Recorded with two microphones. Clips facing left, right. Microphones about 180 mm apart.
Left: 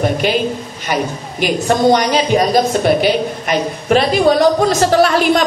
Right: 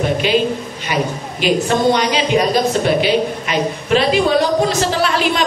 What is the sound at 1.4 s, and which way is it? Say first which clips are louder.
A woman's voice: left 1 dB; 45° left (ahead or behind).